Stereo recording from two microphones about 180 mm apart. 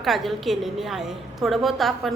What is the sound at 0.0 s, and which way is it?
A woman's voice, centre (ahead or behind).